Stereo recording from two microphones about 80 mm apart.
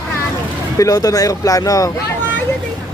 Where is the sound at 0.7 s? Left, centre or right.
Left.